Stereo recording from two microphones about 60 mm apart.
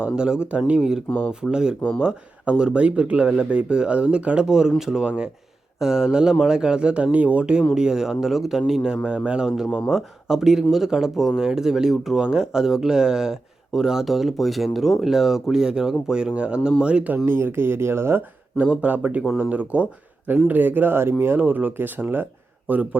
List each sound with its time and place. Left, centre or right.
0.0 s speech: centre
17.2 s speech: right
18.5 s speech: right